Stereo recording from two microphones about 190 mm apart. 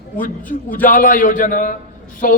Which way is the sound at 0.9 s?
45° left (ahead or behind).